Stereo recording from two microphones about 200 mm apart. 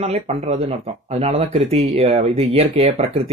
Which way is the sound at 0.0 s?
35° right (ahead or behind).